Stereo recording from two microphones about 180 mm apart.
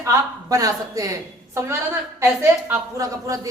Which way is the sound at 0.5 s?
20° right (ahead or behind).